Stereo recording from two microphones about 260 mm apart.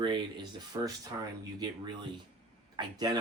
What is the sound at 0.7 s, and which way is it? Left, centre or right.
Speech, centre.